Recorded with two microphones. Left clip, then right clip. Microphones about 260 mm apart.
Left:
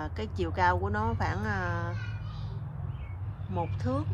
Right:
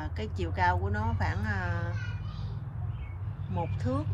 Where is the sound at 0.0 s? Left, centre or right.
Centre.